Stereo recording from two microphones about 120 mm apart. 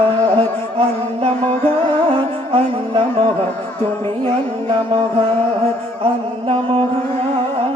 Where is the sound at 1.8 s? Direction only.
45° right (ahead or behind).